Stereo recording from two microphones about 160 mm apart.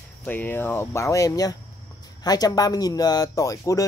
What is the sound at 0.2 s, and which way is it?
Speech, 10° left (ahead or behind).